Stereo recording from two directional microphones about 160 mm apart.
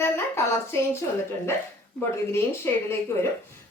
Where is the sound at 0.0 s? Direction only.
15° left (ahead or behind).